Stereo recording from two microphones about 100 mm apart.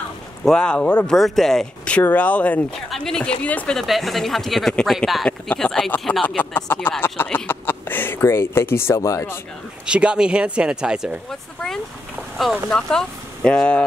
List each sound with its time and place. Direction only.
0.5 s speech: 10° left (ahead or behind)
3.7 s speech: centre (ahead or behind); by 9.4 s 25° left (ahead or behind)
9.8 s speech: 10° right (ahead or behind)
11.2 s speech: 5° left (ahead or behind)